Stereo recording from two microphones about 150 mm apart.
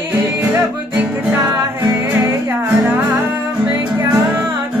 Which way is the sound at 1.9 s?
10° right (ahead or behind).